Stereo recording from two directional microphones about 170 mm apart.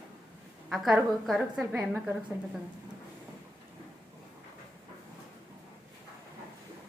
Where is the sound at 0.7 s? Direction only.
Centre (ahead or behind).